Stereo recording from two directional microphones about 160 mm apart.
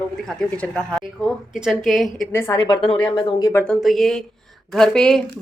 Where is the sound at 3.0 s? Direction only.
15° left (ahead or behind).